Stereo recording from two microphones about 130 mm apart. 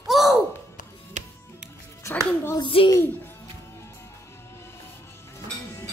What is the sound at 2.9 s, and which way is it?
Speech, 15° left (ahead or behind).